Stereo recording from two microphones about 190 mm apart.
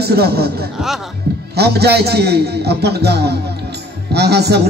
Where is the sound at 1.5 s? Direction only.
60° right (ahead or behind).